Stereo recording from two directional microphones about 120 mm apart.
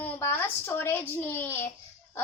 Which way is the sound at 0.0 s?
20° left (ahead or behind).